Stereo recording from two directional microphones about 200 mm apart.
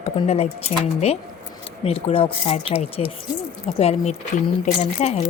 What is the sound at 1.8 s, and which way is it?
Speech, 30° left (ahead or behind).